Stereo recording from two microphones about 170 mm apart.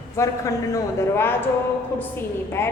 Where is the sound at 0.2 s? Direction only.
15° left (ahead or behind).